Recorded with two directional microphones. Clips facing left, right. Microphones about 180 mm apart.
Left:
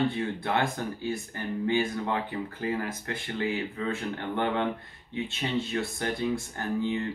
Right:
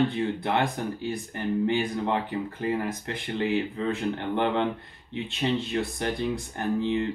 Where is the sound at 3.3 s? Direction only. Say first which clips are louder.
Right 4 dB; 20° right (ahead or behind).